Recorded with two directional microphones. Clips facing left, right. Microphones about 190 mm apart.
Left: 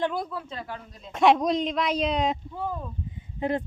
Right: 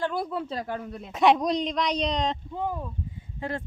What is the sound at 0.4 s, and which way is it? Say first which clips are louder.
Speech: right 5 dB; 40° right (ahead or behind).